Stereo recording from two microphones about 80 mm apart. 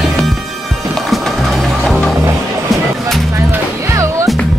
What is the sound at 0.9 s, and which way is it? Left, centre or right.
Music, centre.